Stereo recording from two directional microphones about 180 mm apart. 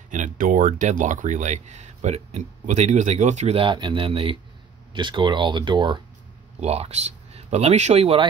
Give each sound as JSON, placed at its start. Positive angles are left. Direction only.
{"t": 0.1, "sound": "speech", "side_deg": -45}